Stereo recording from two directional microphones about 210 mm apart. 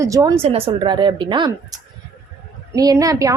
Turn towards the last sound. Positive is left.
turn(degrees=-15)  # may be behind; listen again after turning